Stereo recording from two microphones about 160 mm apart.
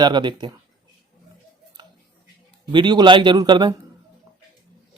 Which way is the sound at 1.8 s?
30° right (ahead or behind).